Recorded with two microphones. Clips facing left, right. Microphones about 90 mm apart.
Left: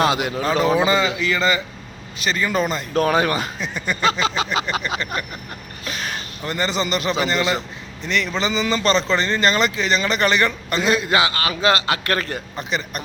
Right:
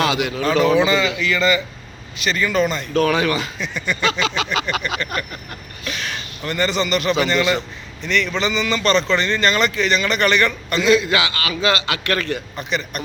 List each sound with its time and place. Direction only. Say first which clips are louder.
0.0 s a man's voice: even; 35° left (ahead or behind)
5.8 s a sound: even; 40° left (ahead or behind)
6.4 s a man's voice: right 2 dB; 30° left (ahead or behind)